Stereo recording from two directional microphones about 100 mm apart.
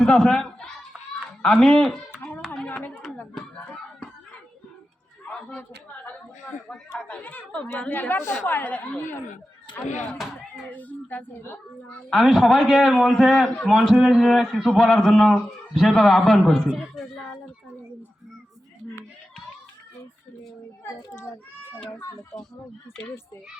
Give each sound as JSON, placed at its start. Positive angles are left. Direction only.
{"t": 0.0, "sound": "a woman's voice", "side_deg": 10}
{"t": 2.6, "sound": "a sound", "side_deg": 15}
{"t": 5.5, "sound": "a sound", "side_deg": 15}
{"t": 7.0, "sound": "a woman's voice", "side_deg": 15}
{"t": 12.2, "sound": "a man's voice", "side_deg": 0}
{"t": 21.1, "sound": "a child's voice", "side_deg": 25}